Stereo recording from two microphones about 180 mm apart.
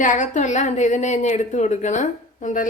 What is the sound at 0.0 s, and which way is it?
A woman's voice, 45° left (ahead or behind).